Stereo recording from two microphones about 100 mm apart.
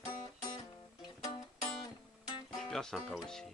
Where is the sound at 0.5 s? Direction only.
50° left (ahead or behind).